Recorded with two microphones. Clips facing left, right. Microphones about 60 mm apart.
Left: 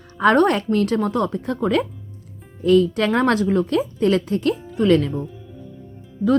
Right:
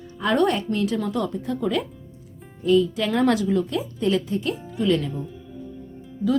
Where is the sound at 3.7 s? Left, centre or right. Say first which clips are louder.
Left 5 dB; left.